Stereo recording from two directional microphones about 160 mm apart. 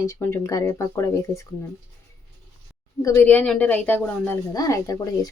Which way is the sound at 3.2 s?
5° left (ahead or behind).